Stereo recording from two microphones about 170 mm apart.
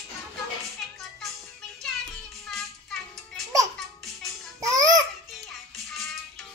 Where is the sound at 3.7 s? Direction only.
Centre (ahead or behind).